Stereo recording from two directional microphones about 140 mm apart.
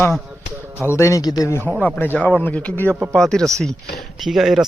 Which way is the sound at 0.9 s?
20° left (ahead or behind).